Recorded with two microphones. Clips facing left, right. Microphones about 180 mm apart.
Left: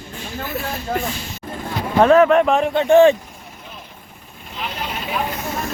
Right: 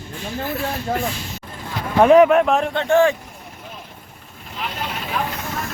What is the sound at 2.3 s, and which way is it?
Speech, centre (ahead or behind).